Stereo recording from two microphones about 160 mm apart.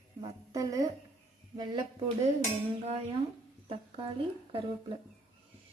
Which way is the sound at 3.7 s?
35° right (ahead or behind).